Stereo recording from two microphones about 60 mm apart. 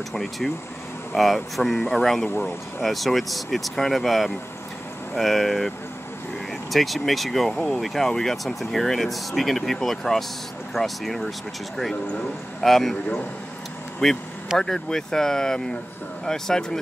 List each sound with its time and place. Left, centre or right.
0.1 s speech: centre
2.2 s speech: left
2.8 s speech: centre
6.7 s speech: centre
14.0 s speech: centre